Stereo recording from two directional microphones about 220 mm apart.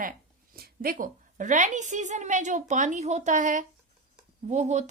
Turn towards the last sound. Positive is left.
turn(degrees=-30)  # may be behind; listen again after turning